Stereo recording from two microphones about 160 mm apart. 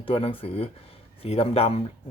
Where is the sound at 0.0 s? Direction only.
35° left (ahead or behind).